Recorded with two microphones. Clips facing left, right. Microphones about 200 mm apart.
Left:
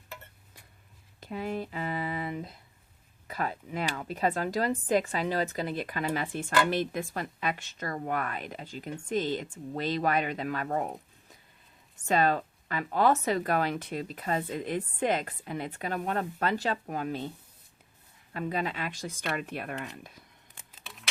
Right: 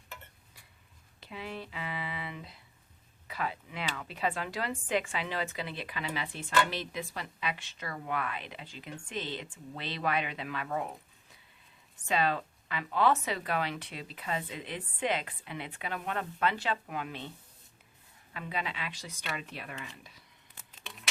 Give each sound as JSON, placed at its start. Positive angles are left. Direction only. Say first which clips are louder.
{"t": 1.2, "sound": "a woman's voice", "louder": "left 7 dB", "side_deg": 45}
{"t": 12.0, "sound": "a woman's voice", "louder": "left 4 dB", "side_deg": 45}
{"t": 18.3, "sound": "a woman's voice", "louder": "left 6 dB", "side_deg": 45}
{"t": 20.8, "sound": "a sound", "louder": "right 1 dB", "side_deg": 0}